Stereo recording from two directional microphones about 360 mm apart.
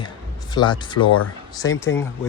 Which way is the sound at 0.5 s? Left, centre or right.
Centre.